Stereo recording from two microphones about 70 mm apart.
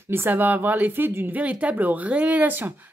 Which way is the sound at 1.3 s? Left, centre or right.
Right.